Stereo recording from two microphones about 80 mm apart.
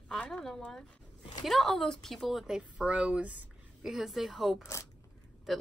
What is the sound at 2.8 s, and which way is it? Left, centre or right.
Speech, centre.